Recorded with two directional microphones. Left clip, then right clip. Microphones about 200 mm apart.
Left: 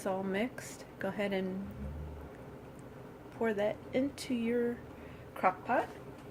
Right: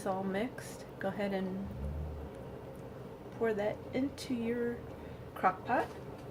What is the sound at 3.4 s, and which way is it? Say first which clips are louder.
A woman's voice: left 1 dB; 40° left (ahead or behind).